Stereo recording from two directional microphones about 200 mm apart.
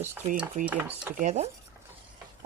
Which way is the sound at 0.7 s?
10° right (ahead or behind).